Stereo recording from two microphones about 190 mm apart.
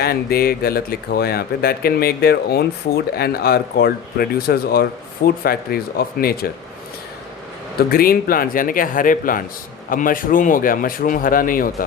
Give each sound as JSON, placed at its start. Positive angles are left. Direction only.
{"t": 0.0, "sound": "speech", "side_deg": 55}
{"t": 7.9, "sound": "speech", "side_deg": 50}